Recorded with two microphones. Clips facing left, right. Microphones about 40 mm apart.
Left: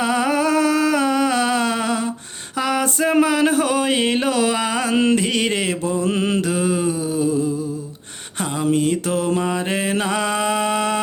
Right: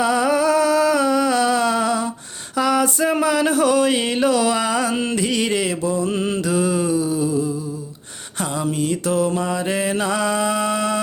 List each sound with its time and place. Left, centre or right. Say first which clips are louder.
0.0 s music: right 1 dB; left
2.6 s a sound: right 3 dB; left
2.8 s mantra: left 1 dB; left
6.1 s mantra: left 2 dB; left
6.4 s a sound: even; left
8.6 s mantra: left 4 dB; left